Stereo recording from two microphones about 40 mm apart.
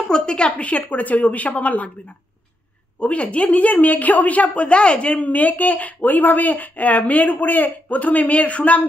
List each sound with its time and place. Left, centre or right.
0.2 s a woman's voice: left
0.5 s a woman's voice: left
3.0 s a woman's voice: left
5.2 s speech: left